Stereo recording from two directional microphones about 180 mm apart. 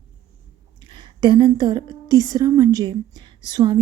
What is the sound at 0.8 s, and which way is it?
A woman's voice, 25° right (ahead or behind).